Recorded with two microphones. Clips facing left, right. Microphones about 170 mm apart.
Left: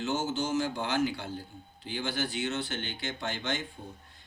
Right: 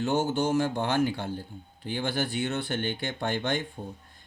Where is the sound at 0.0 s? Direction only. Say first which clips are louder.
Right 5 dB; 60° right (ahead or behind).